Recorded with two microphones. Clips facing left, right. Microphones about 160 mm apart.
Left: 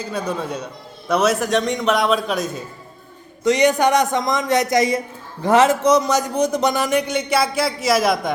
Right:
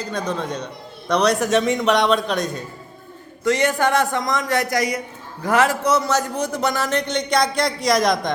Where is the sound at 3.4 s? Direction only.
20° left (ahead or behind).